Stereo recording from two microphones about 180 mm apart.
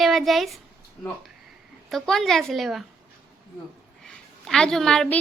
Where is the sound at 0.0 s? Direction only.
Centre (ahead or behind).